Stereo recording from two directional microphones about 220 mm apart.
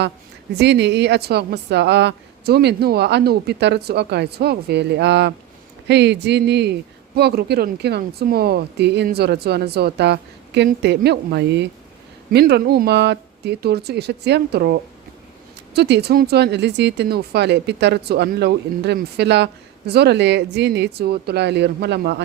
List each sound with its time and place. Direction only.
0.6 s speech: 50° right (ahead or behind)